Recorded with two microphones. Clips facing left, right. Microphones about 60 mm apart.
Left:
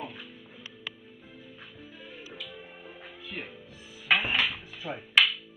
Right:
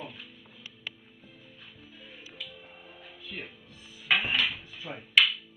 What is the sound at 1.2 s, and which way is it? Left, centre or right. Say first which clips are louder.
Music: left 4 dB; left.